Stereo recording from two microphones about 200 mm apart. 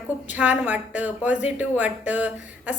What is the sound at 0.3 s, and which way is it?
A woman's voice, 10° right (ahead or behind).